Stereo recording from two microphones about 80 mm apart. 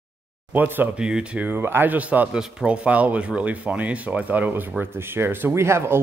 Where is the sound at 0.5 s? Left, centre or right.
Right.